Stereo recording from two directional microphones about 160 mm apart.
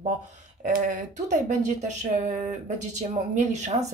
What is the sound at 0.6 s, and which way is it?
Speech, 60° right (ahead or behind).